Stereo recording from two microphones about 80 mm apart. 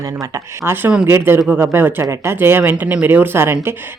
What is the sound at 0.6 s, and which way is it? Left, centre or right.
Speech, right.